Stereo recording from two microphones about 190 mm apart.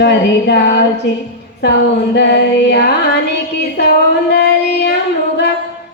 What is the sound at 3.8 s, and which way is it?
Child singing, 60° left (ahead or behind).